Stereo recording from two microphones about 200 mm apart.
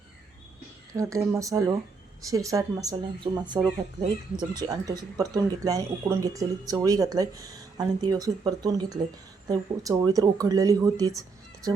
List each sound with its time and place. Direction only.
0.9 s speech: 15° right (ahead or behind)